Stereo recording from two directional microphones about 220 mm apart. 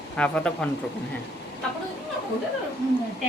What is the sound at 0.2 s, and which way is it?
Speech, 5° left (ahead or behind).